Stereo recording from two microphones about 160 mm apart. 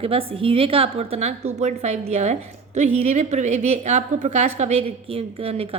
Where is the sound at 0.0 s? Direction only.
35° right (ahead or behind).